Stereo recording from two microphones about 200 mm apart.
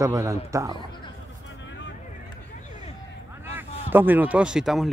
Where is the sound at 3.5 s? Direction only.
10° right (ahead or behind).